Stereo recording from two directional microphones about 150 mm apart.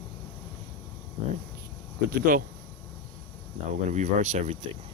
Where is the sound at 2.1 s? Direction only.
70° right (ahead or behind).